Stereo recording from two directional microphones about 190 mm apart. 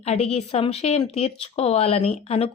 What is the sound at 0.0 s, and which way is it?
A woman's voice, 30° left (ahead or behind).